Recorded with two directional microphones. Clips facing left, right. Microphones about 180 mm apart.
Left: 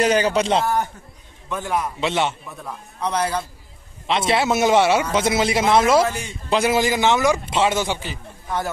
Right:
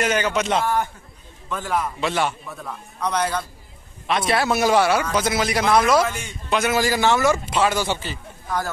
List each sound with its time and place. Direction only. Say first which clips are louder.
0.0 s speech: left 4 dB; 35° left (ahead or behind)
1.5 s a man's voice: left 1 dB; 20° left (ahead or behind)